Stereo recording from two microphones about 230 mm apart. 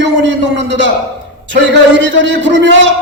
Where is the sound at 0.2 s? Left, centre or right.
Right.